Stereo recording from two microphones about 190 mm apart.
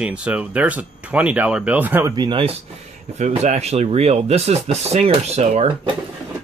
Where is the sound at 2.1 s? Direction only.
25° right (ahead or behind).